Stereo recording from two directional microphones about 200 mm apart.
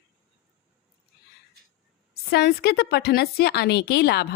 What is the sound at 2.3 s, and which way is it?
A woman's voice, 50° left (ahead or behind).